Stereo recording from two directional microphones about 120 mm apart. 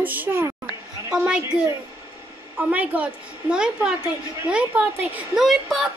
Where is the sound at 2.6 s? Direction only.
10° right (ahead or behind).